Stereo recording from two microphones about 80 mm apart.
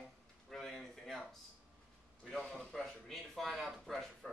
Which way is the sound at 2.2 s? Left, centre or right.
Centre.